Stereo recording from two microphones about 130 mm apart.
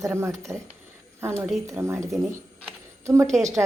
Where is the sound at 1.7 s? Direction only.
20° right (ahead or behind).